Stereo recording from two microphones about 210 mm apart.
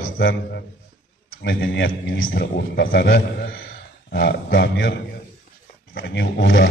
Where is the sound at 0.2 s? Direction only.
50° left (ahead or behind).